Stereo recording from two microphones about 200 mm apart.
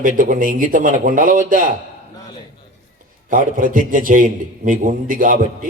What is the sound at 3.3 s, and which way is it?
A man's voice, 45° right (ahead or behind).